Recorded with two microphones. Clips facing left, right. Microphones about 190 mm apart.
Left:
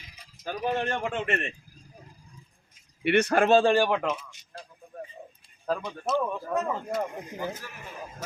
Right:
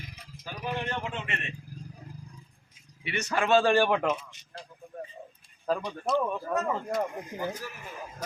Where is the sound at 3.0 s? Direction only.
60° left (ahead or behind).